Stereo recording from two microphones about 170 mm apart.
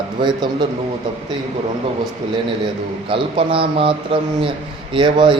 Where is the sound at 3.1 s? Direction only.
30° right (ahead or behind).